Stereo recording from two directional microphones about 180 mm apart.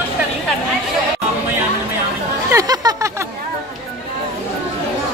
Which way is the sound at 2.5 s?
20° right (ahead or behind).